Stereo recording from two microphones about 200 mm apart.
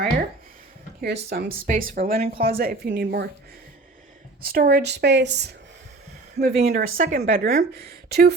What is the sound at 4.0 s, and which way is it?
Speech, 45° right (ahead or behind).